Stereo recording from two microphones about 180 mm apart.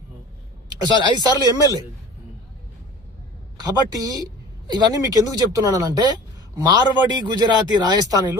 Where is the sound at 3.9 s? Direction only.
20° right (ahead or behind).